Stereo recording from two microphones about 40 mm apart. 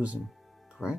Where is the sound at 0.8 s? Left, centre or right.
Centre.